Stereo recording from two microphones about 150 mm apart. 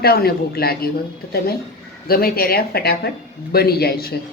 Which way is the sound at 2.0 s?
90° left.